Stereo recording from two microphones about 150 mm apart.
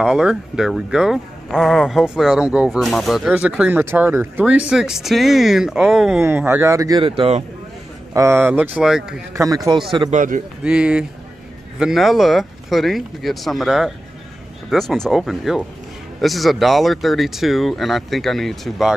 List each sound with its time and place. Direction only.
0.0 s speech: 5° right (ahead or behind)
6.2 s speech: 15° right (ahead or behind)
7.0 s speech: 35° right (ahead or behind)
8.1 s speech: 20° right (ahead or behind)
9.3 s a man's voice: 20° right (ahead or behind)
10.1 s a man's voice: 60° right (ahead or behind)
10.6 s speech: 5° right (ahead or behind)